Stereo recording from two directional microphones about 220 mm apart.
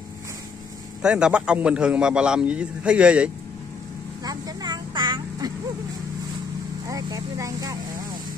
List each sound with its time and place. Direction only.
1.0 s a man's voice: 5° right (ahead or behind)
4.2 s vehicle: 15° right (ahead or behind)
6.9 s speech: 15° right (ahead or behind)